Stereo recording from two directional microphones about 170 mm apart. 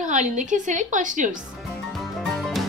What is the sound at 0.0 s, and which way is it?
A woman's voice, 45° right (ahead or behind).